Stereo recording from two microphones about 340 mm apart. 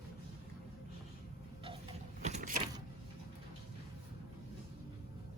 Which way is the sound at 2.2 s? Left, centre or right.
Centre.